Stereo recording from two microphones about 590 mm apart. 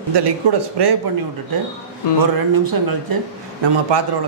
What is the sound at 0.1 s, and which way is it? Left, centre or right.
Speech, right.